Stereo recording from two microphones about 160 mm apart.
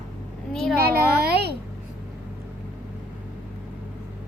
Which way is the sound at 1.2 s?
90° right.